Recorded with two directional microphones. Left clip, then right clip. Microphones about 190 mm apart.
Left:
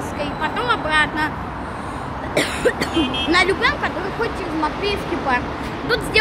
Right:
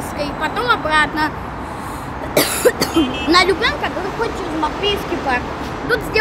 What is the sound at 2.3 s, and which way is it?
Speech, 30° right (ahead or behind).